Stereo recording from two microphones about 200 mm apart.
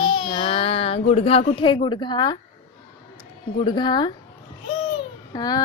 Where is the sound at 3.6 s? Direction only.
20° left (ahead or behind).